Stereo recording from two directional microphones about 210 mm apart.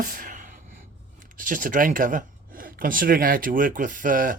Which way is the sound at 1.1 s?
40° right (ahead or behind).